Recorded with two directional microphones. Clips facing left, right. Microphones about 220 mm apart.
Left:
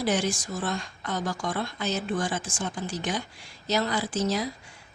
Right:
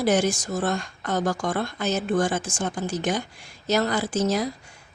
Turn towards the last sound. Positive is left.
turn(degrees=-45)  # may be behind; listen again after turning